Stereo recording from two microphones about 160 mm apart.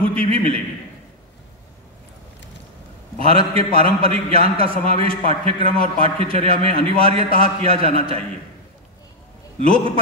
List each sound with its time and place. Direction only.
0.1 s a man's voice: 40° right (ahead or behind)
3.2 s a man's voice: 40° right (ahead or behind)
7.2 s a man's voice: 55° left (ahead or behind)
7.6 s a man's voice: 40° right (ahead or behind)
9.6 s a man's voice: 35° right (ahead or behind)